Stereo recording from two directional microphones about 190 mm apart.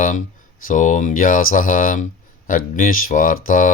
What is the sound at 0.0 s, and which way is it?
Speech, 40° left (ahead or behind).